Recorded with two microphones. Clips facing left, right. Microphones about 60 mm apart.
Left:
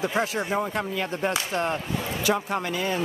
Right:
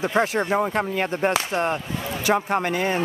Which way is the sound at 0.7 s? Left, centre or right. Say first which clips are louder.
Right 4 dB; right.